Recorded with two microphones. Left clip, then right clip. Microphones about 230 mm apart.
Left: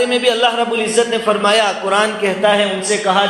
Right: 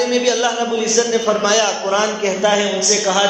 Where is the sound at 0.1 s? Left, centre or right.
Left.